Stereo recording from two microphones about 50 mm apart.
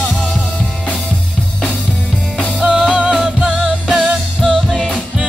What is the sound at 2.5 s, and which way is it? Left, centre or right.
Music, centre.